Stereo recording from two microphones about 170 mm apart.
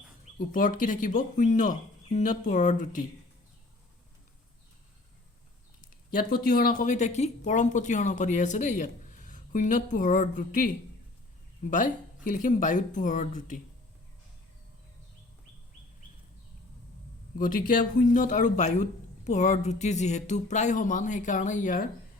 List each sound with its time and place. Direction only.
0.3 s speech: 50° left (ahead or behind)
6.1 s speech: 60° left (ahead or behind)
17.3 s speech: 55° left (ahead or behind)